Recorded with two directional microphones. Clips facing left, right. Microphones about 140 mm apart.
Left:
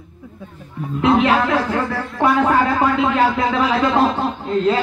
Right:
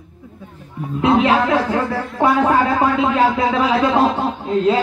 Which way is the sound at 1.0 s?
25° right (ahead or behind).